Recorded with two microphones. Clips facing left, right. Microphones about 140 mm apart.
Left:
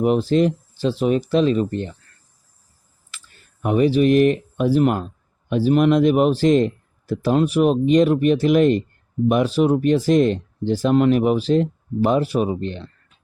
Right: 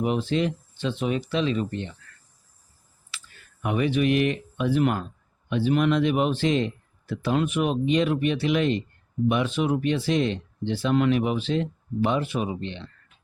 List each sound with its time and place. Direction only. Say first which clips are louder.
0.0 s speech: left 7 dB; 40° left (ahead or behind)
3.1 s speech: right 1 dB; 35° left (ahead or behind)